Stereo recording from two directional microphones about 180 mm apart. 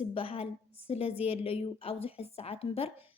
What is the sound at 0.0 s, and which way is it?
A woman's voice, 30° left (ahead or behind).